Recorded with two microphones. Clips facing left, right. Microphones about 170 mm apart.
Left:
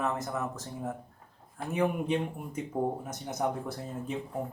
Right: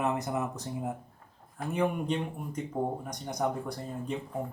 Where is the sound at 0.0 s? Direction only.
15° right (ahead or behind).